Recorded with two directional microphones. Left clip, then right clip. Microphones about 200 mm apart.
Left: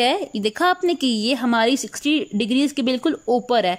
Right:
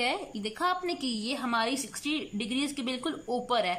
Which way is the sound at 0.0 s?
40° left (ahead or behind).